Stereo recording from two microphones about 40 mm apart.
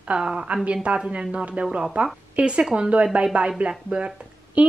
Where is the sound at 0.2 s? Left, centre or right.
Right.